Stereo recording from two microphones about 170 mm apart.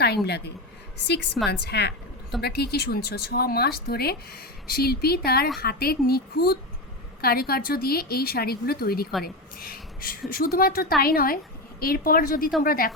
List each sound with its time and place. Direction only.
0.3 s a woman's voice: 75° left (ahead or behind); by 12.9 s 55° left (ahead or behind)